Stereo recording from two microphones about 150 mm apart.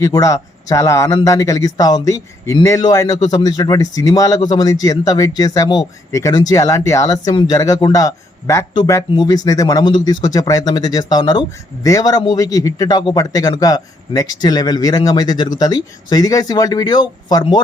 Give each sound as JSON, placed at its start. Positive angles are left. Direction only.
{"t": 0.0, "sound": "speech", "side_deg": 25}